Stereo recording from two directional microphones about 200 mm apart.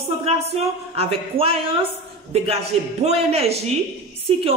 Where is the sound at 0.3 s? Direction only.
30° right (ahead or behind).